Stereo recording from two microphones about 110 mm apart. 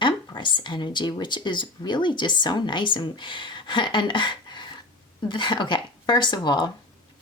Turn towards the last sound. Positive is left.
turn(degrees=45)  # may be behind; listen again after turning